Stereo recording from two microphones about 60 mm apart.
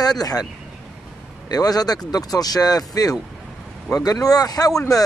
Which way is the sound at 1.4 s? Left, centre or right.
Left.